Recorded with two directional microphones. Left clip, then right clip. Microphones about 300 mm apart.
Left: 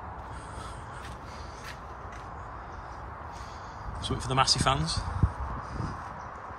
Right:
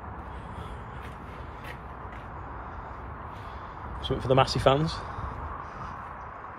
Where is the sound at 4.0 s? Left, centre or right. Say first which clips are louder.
Right 4 dB; centre.